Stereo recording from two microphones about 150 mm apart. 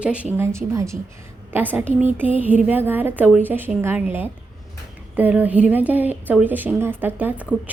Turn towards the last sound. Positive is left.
turn(degrees=-10)  # may be behind; listen again after turning